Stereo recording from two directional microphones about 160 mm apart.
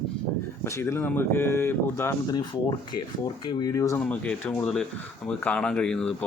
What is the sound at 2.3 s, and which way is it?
Speech, 25° left (ahead or behind).